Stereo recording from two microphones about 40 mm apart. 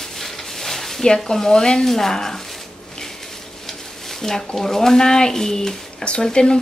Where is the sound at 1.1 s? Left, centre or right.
Centre.